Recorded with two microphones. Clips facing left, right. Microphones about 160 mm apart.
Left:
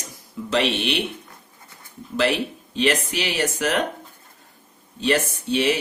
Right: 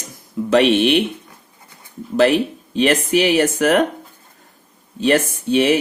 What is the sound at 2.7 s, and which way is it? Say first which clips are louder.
Speech: right 6 dB; 50° right (ahead or behind).